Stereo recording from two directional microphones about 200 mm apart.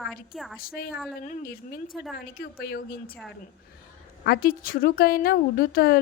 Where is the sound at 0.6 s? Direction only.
50° left (ahead or behind).